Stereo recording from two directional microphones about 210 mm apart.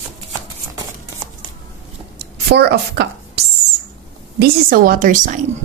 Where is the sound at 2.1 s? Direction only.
50° right (ahead or behind).